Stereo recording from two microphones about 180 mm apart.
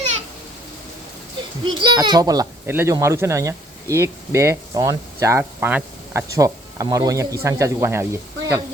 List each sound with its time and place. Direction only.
1.6 s a child's voice: 25° right (ahead or behind)